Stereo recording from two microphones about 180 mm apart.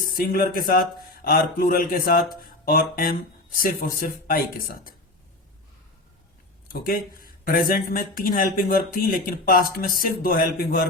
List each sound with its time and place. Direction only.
0.0 s speech: 55° left (ahead or behind)
6.7 s speech: 55° left (ahead or behind)